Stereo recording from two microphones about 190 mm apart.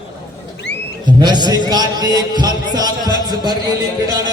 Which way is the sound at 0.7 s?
65° left (ahead or behind).